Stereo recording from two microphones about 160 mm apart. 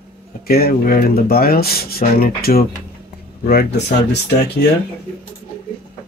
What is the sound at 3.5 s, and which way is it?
Speech, 85° left.